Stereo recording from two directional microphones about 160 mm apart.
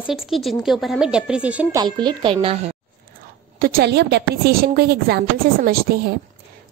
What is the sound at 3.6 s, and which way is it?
A woman's voice, 80° right.